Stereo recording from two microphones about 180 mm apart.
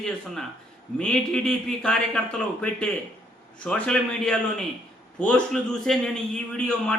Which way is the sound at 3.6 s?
5° left (ahead or behind).